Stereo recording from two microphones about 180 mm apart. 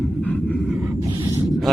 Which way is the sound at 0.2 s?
5° left (ahead or behind).